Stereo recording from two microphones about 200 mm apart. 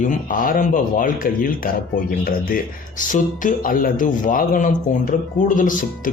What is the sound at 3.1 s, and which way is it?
A man's voice, 40° left (ahead or behind).